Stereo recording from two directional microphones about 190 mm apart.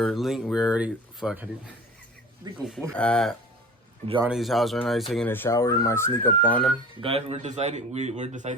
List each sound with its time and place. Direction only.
0.0 s speech: centre (ahead or behind)
2.5 s speech: 20° right (ahead or behind)
2.9 s speech: 5° left (ahead or behind)
7.0 s speech: 30° right (ahead or behind)